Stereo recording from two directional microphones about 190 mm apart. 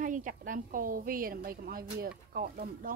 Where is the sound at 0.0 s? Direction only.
45° right (ahead or behind).